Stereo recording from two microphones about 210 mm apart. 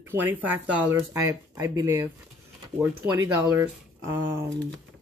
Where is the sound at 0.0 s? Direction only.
10° right (ahead or behind).